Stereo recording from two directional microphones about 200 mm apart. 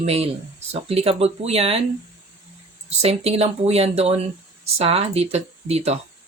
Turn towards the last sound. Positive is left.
turn(degrees=-30)  # may be behind; listen again after turning